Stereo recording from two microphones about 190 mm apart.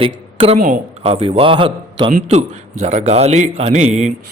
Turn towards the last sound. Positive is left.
turn(degrees=-35)  # may be behind; listen again after turning